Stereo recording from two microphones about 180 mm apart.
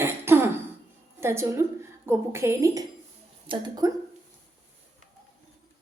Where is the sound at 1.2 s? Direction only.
15° right (ahead or behind).